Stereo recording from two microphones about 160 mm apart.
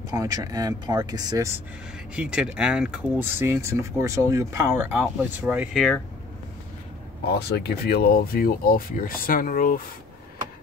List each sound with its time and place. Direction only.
0.1 s speech: 25° right (ahead or behind)
2.1 s speech: 5° right (ahead or behind)
7.3 s speech: 90° left; by 9.8 s 60° left (ahead or behind)